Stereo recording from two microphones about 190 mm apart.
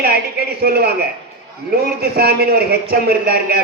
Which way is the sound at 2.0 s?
55° right (ahead or behind).